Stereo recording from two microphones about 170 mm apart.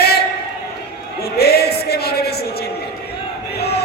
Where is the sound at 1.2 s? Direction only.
70° left (ahead or behind).